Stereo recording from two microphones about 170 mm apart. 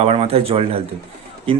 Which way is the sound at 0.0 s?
35° right (ahead or behind).